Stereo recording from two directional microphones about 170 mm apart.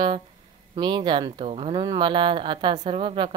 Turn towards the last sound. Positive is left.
turn(degrees=-30)  # may be behind; listen again after turning